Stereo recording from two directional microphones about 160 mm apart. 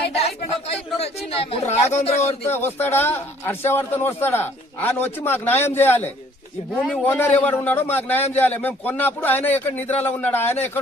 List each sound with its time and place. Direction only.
0.2 s speech: 40° left (ahead or behind)
2.1 s speech: 15° left (ahead or behind)